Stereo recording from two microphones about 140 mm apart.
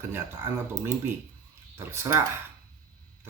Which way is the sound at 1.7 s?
20° right (ahead or behind).